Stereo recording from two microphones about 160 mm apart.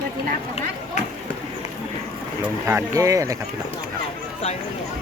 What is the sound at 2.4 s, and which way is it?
Speech, 15° right (ahead or behind).